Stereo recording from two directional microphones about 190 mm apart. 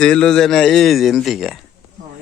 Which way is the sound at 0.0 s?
5° left (ahead or behind).